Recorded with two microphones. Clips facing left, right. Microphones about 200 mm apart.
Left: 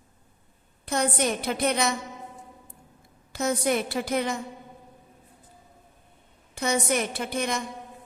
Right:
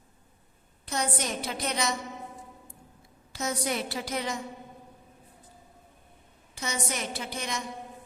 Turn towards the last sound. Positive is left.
turn(degrees=55)  # may be behind; listen again after turning